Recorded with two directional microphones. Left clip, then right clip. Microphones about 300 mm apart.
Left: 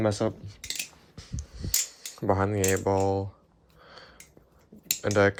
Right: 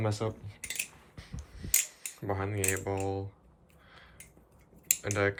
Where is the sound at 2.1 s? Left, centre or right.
Left.